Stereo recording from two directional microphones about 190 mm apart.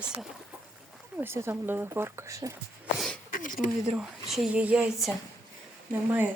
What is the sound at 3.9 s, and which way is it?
A woman's voice, centre (ahead or behind).